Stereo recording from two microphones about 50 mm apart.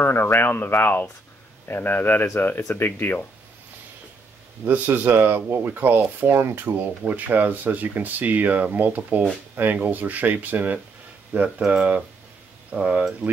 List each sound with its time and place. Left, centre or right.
0.0 s speech: left
4.6 s speech: right
5.1 s speech: right
7.1 s speech: right